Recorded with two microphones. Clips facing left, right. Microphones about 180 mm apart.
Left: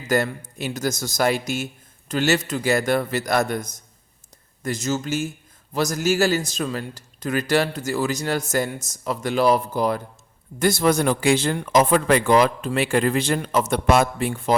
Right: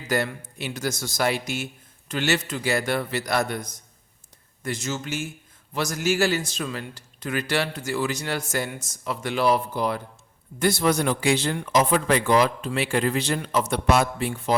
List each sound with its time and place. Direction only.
0.1 s a man's voice: 45° left (ahead or behind)